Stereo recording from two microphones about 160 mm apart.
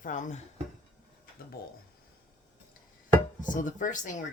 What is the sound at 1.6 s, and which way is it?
Speech, 70° left (ahead or behind).